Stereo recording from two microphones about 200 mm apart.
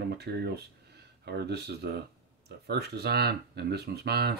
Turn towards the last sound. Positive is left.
turn(degrees=-55)  # may be behind; listen again after turning